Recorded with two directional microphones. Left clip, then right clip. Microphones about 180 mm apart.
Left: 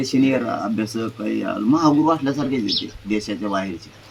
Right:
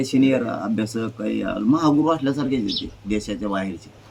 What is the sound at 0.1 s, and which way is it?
Speech, 25° right (ahead or behind).